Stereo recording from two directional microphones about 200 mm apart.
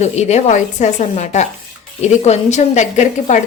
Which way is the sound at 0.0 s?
35° left (ahead or behind).